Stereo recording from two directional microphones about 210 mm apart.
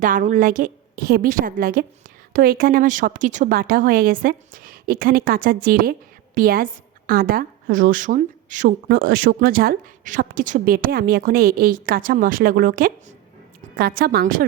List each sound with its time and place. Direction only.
0.0 s a woman's voice: 40° right (ahead or behind)